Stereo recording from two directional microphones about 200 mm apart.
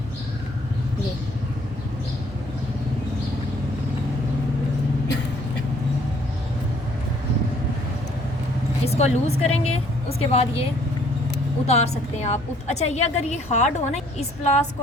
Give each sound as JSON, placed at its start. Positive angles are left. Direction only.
{"t": 8.9, "sound": "a woman's voice", "side_deg": 30}